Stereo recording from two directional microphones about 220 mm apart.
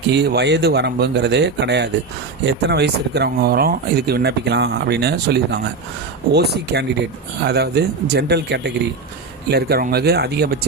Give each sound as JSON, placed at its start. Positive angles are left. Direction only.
{"t": 0.1, "sound": "speech", "side_deg": -50}